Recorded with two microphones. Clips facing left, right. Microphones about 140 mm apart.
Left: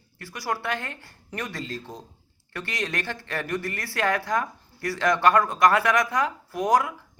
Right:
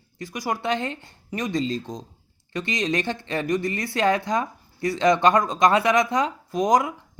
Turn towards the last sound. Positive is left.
turn(degrees=-20)  # may be behind; listen again after turning